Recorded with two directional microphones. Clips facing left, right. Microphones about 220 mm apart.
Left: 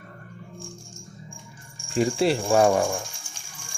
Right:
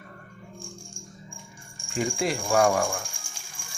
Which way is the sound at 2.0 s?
35° left (ahead or behind).